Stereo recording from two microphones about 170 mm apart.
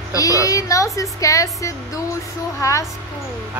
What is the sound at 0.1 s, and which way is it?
A woman's voice, 20° left (ahead or behind).